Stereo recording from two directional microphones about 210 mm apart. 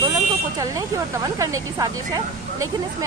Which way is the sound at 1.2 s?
20° right (ahead or behind).